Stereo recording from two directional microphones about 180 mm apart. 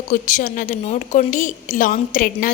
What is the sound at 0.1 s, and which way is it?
A woman's voice, 45° left (ahead or behind).